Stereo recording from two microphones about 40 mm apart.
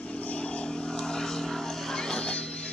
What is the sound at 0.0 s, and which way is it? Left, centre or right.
Vehicle, left.